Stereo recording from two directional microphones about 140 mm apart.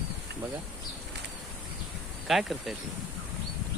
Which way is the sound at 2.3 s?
Centre (ahead or behind).